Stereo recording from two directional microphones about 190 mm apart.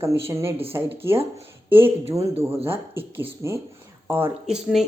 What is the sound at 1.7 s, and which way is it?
Speech, 10° right (ahead or behind).